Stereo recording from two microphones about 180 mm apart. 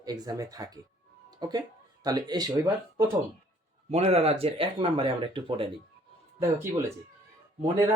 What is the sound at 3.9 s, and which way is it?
Speech, 35° right (ahead or behind).